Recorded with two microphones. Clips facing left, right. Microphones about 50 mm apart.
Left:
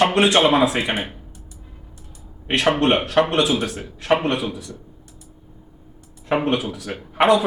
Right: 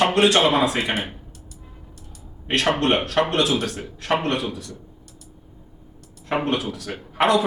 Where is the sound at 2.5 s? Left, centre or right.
Centre.